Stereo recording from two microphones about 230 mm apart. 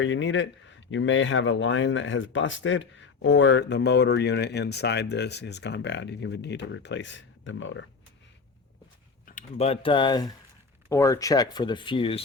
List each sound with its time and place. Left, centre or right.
0.0 s speech: left
9.2 s speech: left